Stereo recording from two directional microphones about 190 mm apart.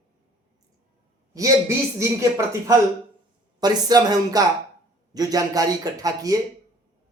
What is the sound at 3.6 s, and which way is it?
A man's voice, 20° right (ahead or behind).